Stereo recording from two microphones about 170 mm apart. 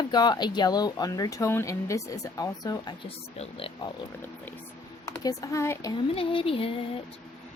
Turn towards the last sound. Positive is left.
turn(degrees=30)  # may be behind; listen again after turning